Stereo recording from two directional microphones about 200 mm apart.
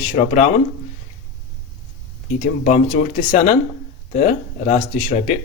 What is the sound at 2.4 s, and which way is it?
Speech, 35° left (ahead or behind).